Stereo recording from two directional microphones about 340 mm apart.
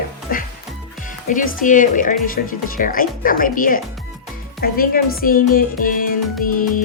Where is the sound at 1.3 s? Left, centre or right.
Left.